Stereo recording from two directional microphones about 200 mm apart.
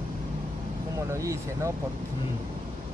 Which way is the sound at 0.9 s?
15° right (ahead or behind).